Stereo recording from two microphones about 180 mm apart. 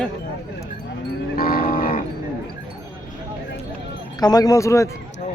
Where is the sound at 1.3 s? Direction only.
55° left (ahead or behind).